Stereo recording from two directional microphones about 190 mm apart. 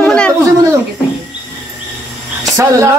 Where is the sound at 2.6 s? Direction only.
15° right (ahead or behind).